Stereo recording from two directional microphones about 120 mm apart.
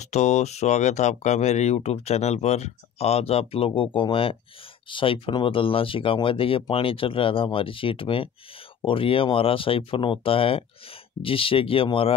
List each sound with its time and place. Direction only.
0.0 s speech: 70° left (ahead or behind); by 12.2 s 50° left (ahead or behind)